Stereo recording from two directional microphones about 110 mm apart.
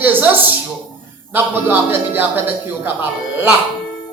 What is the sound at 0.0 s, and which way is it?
Speech, 15° right (ahead or behind).